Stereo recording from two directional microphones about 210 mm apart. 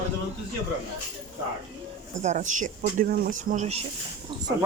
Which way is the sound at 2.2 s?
35° right (ahead or behind).